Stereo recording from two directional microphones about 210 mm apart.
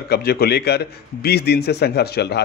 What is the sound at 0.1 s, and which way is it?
A man's voice, 50° left (ahead or behind).